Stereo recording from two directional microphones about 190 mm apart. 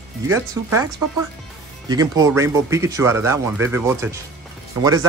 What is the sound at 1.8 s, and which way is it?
Speech, 20° right (ahead or behind).